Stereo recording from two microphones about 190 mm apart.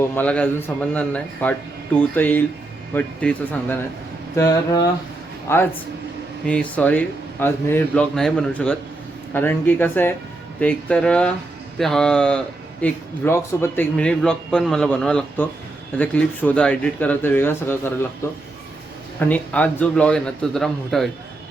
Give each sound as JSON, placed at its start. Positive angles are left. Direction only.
{"t": 0.1, "sound": "speech", "side_deg": 10}
{"t": 4.4, "sound": "a sound", "side_deg": 20}
{"t": 5.5, "sound": "a man's voice", "side_deg": 15}
{"t": 19.3, "sound": "a man's voice", "side_deg": 10}